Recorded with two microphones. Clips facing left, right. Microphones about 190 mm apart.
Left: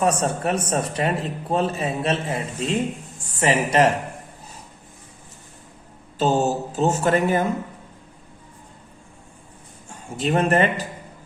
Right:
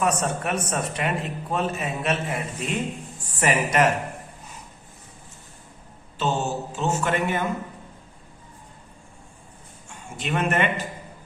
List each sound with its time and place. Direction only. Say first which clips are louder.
0.0 s speech: left 3 dB; 30° left (ahead or behind)
6.1 s speech: left 5 dB; 40° left (ahead or behind)
10.2 s speech: left 5 dB; 35° left (ahead or behind)